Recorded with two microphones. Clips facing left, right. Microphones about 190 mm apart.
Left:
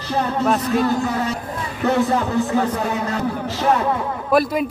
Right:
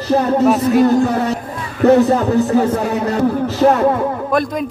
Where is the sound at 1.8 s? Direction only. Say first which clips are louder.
Right 8 dB; 40° right (ahead or behind).